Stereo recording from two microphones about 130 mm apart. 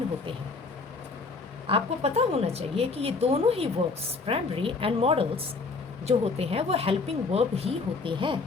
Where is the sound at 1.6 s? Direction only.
50° right (ahead or behind).